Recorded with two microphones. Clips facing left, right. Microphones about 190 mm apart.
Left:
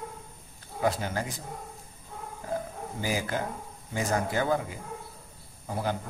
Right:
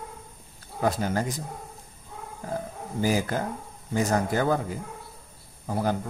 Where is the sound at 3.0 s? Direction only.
45° right (ahead or behind).